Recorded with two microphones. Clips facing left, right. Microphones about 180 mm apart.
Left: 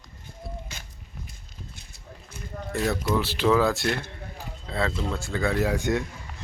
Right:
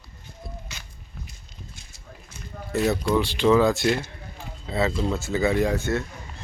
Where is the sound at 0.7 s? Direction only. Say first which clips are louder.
Left 1 dB; 50° left (ahead or behind).